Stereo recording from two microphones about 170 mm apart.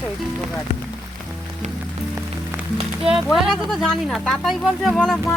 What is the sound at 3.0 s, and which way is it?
Speech, centre (ahead or behind).